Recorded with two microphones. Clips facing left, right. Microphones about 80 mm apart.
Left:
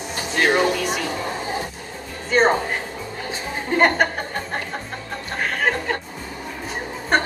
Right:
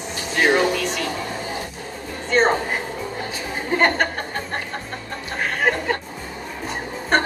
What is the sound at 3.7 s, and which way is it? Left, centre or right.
Music, centre.